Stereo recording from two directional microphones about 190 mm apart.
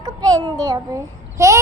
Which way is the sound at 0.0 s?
20° right (ahead or behind).